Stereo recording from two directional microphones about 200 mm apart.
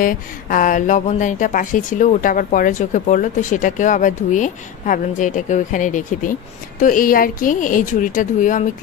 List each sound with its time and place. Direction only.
0.0 s speech: 45° left (ahead or behind)